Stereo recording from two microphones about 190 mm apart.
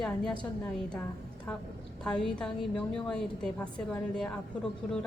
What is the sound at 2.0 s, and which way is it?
A woman's voice, 5° left (ahead or behind).